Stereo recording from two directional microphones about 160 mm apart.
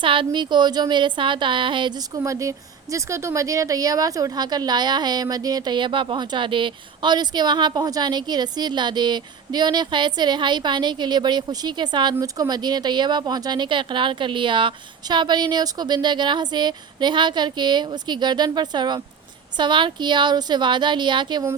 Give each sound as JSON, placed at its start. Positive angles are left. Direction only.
{"t": 0.0, "sound": "a woman's voice", "side_deg": -30}